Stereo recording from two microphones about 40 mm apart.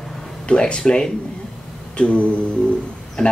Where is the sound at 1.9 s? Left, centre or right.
Left.